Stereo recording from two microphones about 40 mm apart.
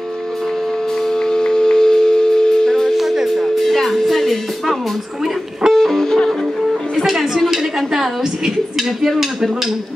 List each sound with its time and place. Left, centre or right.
1.0 s shofar: centre
2.9 s music: centre
3.6 s music: centre
6.7 s music: centre
7.5 s a woman's voice: centre